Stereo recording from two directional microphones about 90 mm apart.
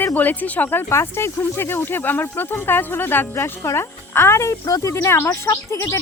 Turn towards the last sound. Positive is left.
turn(degrees=30)  # may be behind; listen again after turning